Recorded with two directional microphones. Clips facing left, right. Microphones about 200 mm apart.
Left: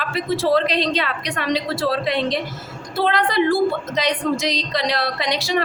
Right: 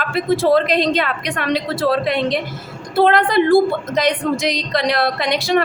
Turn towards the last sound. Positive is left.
turn(degrees=-55)  # may be behind; listen again after turning